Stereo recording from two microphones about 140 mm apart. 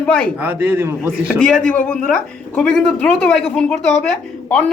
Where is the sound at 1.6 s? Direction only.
10° left (ahead or behind).